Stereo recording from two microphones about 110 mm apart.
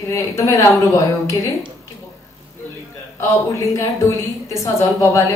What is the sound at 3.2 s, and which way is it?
A woman's voice, 30° left (ahead or behind).